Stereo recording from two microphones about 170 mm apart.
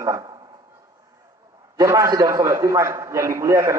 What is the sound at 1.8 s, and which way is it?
A man's voice, 20° right (ahead or behind).